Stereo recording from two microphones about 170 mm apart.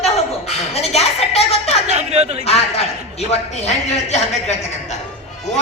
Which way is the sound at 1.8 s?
40° right (ahead or behind).